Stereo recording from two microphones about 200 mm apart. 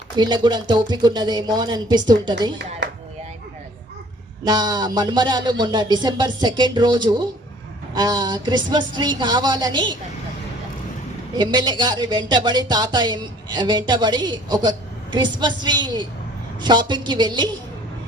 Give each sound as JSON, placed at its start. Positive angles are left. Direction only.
{"t": 0.2, "sound": "speech", "side_deg": -20}
{"t": 2.8, "sound": "a sound", "side_deg": -60}
{"t": 4.4, "sound": "speech", "side_deg": -20}
{"t": 11.3, "sound": "speech", "side_deg": -20}